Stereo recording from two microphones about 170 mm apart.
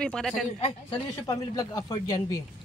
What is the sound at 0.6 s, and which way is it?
Speech, 35° left (ahead or behind).